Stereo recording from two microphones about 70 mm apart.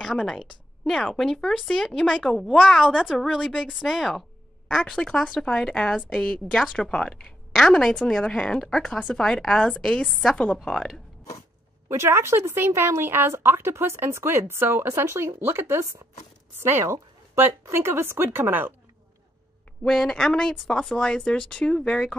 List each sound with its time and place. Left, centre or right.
0.0 s a woman's voice: centre
10.3 s a woman's voice: centre
10.6 s speech: centre
11.9 s speech: right
19.8 s a woman's voice: centre